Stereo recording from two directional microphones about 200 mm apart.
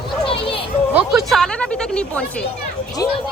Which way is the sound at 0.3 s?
25° left (ahead or behind).